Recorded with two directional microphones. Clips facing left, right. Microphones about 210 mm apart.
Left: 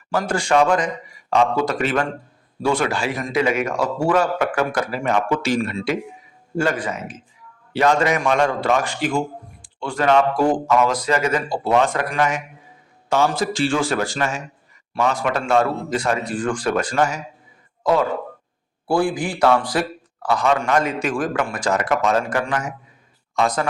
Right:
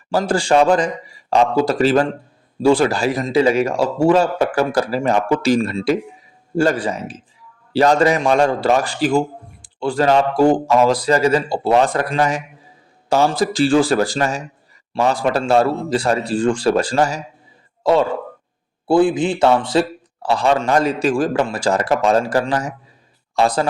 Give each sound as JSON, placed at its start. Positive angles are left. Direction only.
{"t": 0.1, "sound": "a man's voice", "side_deg": -30}